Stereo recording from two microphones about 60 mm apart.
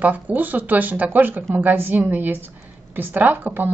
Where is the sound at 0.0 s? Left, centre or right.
Right.